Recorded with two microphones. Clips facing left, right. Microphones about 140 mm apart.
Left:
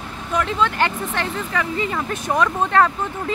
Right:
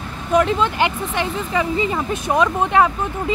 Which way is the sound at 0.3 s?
15° right (ahead or behind).